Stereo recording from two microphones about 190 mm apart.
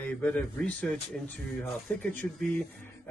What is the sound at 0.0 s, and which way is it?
Speech, 5° left (ahead or behind).